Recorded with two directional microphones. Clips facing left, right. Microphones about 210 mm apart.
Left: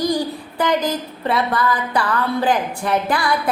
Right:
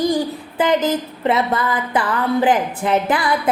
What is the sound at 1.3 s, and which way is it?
Female singing, 20° right (ahead or behind).